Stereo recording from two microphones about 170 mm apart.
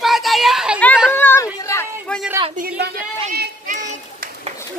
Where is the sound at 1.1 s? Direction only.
10° left (ahead or behind).